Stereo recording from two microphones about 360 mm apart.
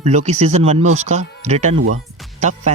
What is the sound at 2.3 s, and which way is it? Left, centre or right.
Music, centre.